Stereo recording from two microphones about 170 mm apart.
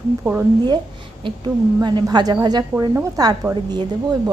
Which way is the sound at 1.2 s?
30° right (ahead or behind).